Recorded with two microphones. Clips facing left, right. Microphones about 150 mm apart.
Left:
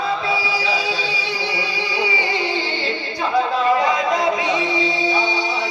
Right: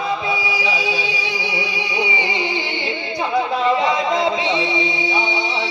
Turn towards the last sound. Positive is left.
turn(degrees=-20)  # may be behind; listen again after turning